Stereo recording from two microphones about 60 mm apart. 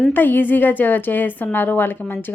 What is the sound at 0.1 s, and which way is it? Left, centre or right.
A woman's voice, left.